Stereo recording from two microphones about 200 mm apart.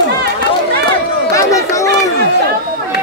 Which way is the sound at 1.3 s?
15° left (ahead or behind).